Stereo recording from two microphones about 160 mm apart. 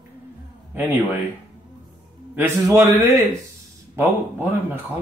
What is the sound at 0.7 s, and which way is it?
Speech, 10° right (ahead or behind).